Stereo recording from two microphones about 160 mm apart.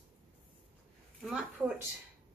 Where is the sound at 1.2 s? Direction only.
5° right (ahead or behind).